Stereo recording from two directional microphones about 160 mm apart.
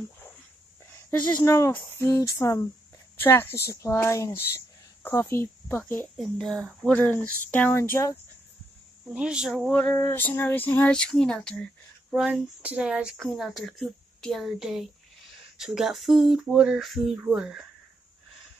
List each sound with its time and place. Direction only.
1.2 s a woman's voice: 20° left (ahead or behind)
6.3 s speech: 5° left (ahead or behind)
9.1 s speech: 5° right (ahead or behind)
9.7 s speech: 10° left (ahead or behind)